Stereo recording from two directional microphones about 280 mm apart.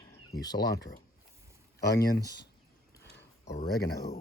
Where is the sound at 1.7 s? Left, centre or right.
Left.